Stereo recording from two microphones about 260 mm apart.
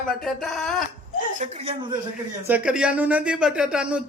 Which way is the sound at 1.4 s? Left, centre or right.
Right.